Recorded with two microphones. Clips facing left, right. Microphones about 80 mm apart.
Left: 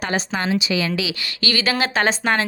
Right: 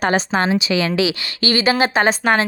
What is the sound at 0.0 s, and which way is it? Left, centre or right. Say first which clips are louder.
A woman's voice: right 6 dB; right.